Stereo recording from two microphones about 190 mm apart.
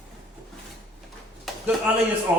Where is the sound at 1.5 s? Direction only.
Centre (ahead or behind).